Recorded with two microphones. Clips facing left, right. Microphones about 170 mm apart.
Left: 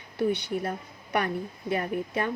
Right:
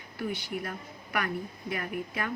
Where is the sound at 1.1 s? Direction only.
25° left (ahead or behind).